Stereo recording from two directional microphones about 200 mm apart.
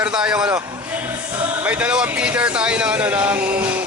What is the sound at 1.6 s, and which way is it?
Speech, 5° right (ahead or behind).